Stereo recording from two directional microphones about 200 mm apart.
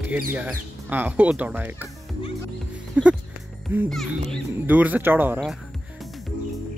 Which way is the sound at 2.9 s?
5° right (ahead or behind).